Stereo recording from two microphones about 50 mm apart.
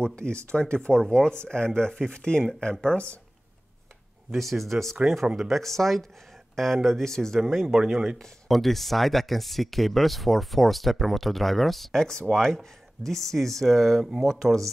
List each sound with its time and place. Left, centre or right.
0.0 s speech: centre
4.3 s speech: centre